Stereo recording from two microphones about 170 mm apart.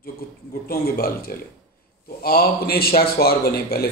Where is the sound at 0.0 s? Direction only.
60° left (ahead or behind).